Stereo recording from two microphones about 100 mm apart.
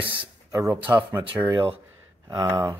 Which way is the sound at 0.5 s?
30° right (ahead or behind).